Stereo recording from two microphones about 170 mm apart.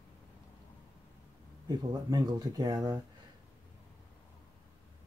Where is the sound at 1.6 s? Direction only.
25° right (ahead or behind).